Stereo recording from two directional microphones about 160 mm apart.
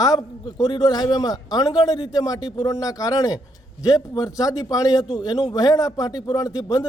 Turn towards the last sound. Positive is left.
turn(degrees=20)  # may be behind; listen again after turning